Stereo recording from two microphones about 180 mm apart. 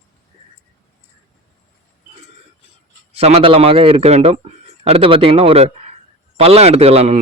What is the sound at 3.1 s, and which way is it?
A man's voice, 35° right (ahead or behind).